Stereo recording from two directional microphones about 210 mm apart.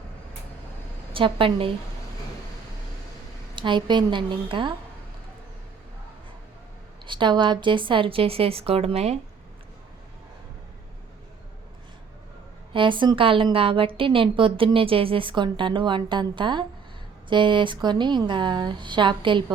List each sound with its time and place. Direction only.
1.1 s a woman's voice: 25° right (ahead or behind)
3.5 s a woman's voice: 20° right (ahead or behind)
7.0 s a woman's voice: 20° right (ahead or behind)
12.7 s a woman's voice: 25° right (ahead or behind)